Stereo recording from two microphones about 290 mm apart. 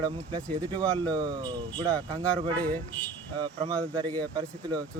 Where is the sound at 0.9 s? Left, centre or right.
Centre.